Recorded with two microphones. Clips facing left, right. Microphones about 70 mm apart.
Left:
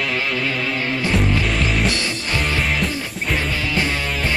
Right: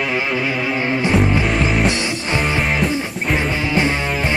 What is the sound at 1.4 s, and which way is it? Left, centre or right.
Music, centre.